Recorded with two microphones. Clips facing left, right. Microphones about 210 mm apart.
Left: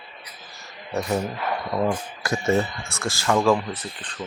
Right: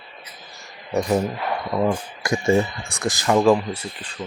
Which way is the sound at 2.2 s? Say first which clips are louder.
Right 3 dB; 15° right (ahead or behind).